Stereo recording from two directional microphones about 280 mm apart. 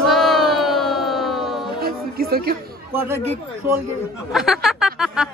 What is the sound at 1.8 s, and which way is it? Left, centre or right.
Music, right.